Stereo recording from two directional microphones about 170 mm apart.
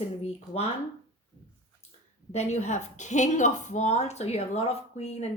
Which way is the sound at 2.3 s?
40° left (ahead or behind).